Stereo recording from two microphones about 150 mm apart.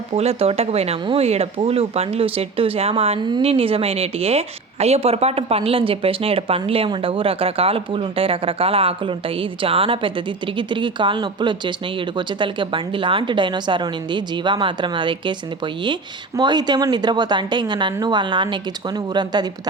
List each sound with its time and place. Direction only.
0.1 s a woman's voice: 45° right (ahead or behind); by 19.5 s 30° right (ahead or behind)